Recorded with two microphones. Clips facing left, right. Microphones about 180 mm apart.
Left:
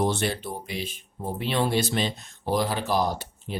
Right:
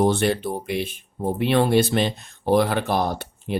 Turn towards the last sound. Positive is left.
turn(degrees=-60)  # may be behind; listen again after turning